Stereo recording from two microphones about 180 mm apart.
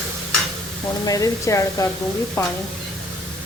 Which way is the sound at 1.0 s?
20° left (ahead or behind).